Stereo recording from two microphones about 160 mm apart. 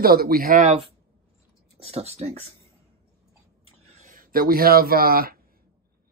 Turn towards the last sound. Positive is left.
turn(degrees=-70)  # may be behind; listen again after turning